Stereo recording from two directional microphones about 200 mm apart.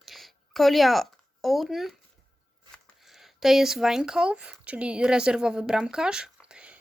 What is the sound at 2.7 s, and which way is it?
Speech, centre (ahead or behind).